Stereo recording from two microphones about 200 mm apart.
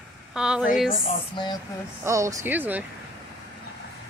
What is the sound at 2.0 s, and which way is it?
Speech, 15° right (ahead or behind).